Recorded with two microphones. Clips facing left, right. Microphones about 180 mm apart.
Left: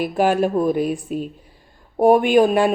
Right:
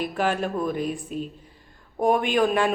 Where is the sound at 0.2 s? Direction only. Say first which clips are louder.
Left 8 dB; 45° left (ahead or behind).